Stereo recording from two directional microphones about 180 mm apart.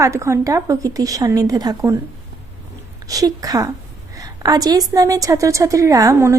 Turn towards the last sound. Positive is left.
turn(degrees=-15)  # may be behind; listen again after turning